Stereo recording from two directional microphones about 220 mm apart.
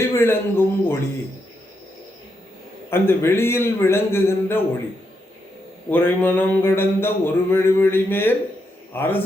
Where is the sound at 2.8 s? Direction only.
10° left (ahead or behind).